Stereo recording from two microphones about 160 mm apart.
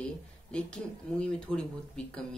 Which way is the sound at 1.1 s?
5° left (ahead or behind).